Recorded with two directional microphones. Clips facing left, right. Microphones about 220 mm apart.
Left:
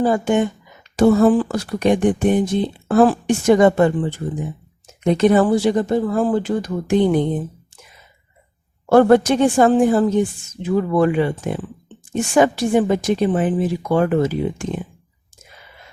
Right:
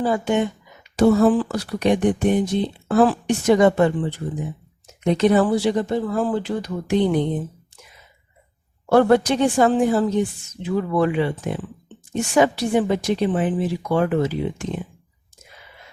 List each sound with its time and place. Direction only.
0.0 s speech: 45° left (ahead or behind)
8.9 s speech: 50° left (ahead or behind)